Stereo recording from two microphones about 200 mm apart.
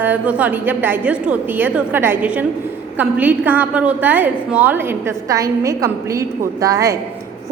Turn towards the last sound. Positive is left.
turn(degrees=-15)  # may be behind; listen again after turning